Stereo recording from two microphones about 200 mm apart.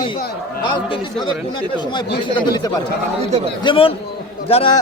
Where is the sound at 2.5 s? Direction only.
20° left (ahead or behind).